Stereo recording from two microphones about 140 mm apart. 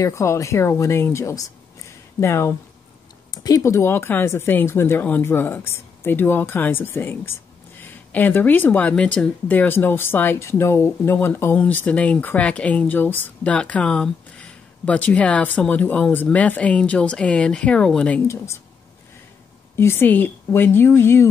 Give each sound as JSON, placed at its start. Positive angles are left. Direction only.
{"t": 0.0, "sound": "speech", "side_deg": 20}
{"t": 19.7, "sound": "speech", "side_deg": 15}